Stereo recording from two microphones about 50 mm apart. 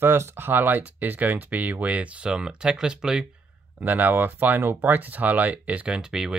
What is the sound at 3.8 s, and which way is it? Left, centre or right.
Speech, right.